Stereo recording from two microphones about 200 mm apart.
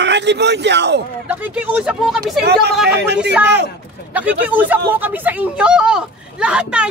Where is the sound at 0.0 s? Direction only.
60° right (ahead or behind).